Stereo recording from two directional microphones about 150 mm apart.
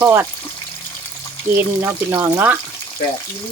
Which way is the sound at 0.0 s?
15° right (ahead or behind).